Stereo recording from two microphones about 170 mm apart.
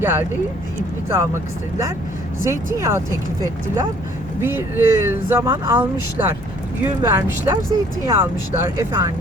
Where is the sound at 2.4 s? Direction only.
15° right (ahead or behind).